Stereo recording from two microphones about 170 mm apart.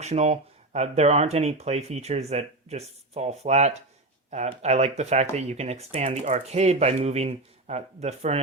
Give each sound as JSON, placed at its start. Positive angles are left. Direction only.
{"t": 0.0, "sound": "speech", "side_deg": -40}